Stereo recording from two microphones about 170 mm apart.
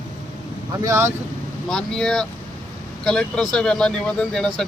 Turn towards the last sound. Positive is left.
turn(degrees=5)  # may be behind; listen again after turning